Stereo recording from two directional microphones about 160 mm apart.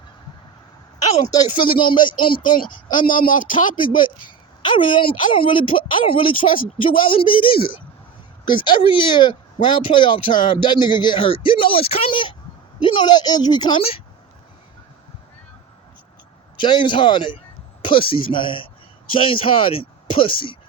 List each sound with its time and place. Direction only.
1.7 s speech: 30° left (ahead or behind)
3.1 s a man's voice: 60° left (ahead or behind)
3.8 s a woman's voice: 30° left (ahead or behind)
16.6 s a woman's voice: 30° left (ahead or behind)